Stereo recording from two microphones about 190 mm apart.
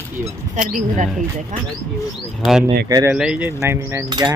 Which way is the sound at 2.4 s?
5° right (ahead or behind).